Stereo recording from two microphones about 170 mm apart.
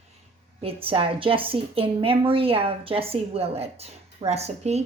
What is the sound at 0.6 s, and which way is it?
A woman's voice, 35° right (ahead or behind).